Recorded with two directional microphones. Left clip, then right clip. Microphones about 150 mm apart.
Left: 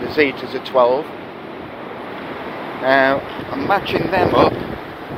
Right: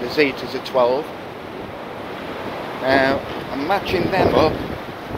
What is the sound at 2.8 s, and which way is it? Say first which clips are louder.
Speech: left 3 dB; 20° right (ahead or behind).